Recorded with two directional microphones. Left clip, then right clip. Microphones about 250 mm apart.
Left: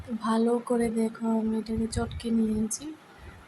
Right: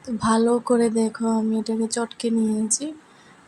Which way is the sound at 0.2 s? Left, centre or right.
Right.